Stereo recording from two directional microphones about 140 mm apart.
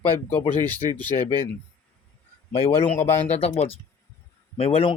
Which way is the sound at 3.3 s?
45° left (ahead or behind).